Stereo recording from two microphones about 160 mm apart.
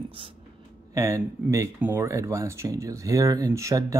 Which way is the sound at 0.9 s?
20° right (ahead or behind).